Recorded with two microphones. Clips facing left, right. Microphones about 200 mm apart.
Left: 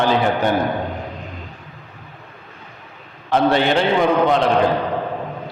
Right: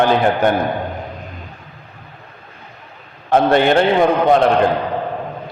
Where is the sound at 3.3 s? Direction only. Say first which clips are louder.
Right 3 dB; 50° right (ahead or behind).